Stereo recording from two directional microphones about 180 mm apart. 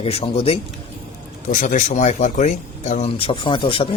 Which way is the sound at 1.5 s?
45° left (ahead or behind).